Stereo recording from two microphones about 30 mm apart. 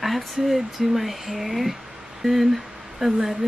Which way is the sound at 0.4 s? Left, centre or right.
Centre.